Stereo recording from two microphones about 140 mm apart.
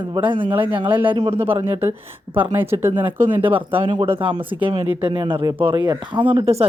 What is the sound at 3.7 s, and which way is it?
Speech, 35° right (ahead or behind).